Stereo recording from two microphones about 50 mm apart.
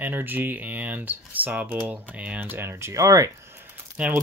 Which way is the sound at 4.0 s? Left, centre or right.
Right.